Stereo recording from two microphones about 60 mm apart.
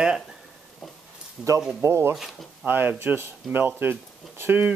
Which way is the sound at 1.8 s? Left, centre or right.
Right.